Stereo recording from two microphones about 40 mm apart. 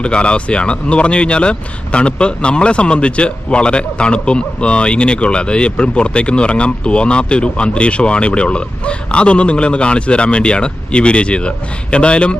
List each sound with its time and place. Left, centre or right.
0.0 s speech: left